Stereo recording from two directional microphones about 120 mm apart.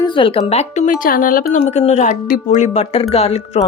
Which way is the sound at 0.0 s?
50° left (ahead or behind).